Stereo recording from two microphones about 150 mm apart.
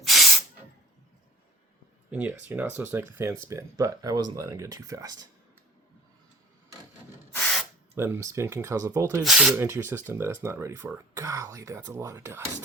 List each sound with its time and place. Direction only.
0.0 s hiss: centre (ahead or behind)
2.0 s speech: 10° right (ahead or behind)
7.9 s speech: 15° right (ahead or behind)
9.2 s speech: 5° right (ahead or behind)
9.6 s speech: 15° right (ahead or behind)